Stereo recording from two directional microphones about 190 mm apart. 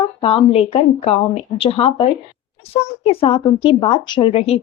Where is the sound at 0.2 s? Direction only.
30° left (ahead or behind).